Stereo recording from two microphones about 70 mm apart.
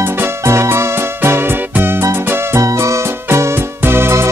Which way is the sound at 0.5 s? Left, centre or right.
Right.